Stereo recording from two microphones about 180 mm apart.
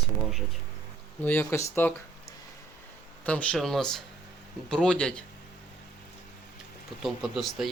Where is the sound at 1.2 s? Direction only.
10° left (ahead or behind).